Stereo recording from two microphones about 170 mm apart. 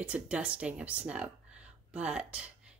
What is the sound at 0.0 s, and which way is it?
Speech, 10° right (ahead or behind).